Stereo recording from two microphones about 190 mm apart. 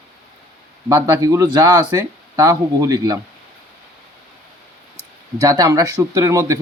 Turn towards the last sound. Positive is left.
turn(degrees=-15)  # may be behind; listen again after turning